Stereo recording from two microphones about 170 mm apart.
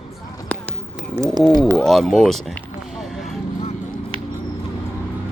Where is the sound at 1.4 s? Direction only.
Centre (ahead or behind).